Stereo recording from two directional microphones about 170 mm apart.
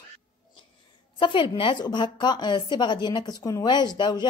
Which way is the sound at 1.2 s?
30° left (ahead or behind).